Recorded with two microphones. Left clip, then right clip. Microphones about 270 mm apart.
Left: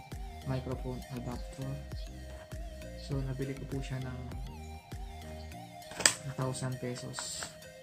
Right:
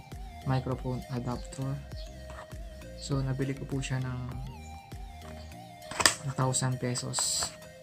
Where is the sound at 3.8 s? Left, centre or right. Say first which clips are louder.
Right 5 dB; right.